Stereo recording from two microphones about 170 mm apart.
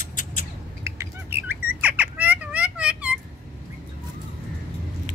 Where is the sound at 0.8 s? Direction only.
15° right (ahead or behind).